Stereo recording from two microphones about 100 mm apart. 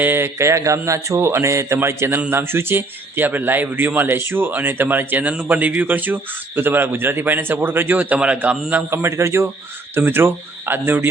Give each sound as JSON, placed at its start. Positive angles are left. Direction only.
{"t": 0.0, "sound": "a man's voice", "side_deg": -20}
{"t": 8.7, "sound": "a man's voice", "side_deg": -25}